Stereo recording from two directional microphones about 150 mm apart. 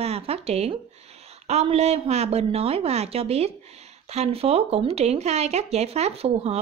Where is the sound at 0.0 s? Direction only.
45° right (ahead or behind).